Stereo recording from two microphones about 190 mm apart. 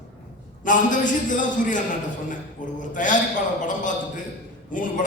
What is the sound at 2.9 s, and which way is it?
A man's voice, 40° left (ahead or behind).